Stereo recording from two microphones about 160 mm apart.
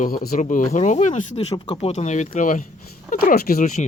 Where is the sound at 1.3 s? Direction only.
30° left (ahead or behind).